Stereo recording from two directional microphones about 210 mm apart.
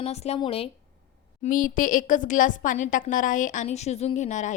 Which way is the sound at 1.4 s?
40° left (ahead or behind).